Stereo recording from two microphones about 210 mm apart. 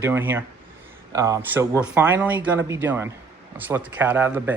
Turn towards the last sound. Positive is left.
turn(degrees=-10)  # may be behind; listen again after turning